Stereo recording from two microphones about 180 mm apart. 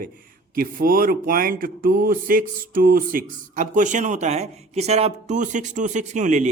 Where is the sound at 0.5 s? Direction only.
55° right (ahead or behind).